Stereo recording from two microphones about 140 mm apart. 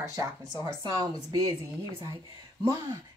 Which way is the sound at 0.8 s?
25° right (ahead or behind).